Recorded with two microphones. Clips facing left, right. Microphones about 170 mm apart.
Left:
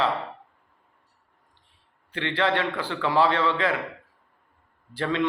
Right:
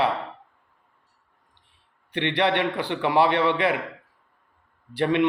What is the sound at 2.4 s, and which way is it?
A man's voice, 15° right (ahead or behind).